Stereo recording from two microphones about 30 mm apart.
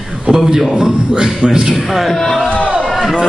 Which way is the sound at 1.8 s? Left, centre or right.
Centre.